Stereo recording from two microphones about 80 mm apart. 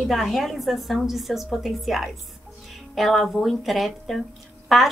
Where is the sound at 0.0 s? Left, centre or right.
Centre.